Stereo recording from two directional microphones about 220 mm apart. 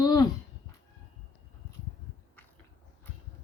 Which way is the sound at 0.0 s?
15° left (ahead or behind).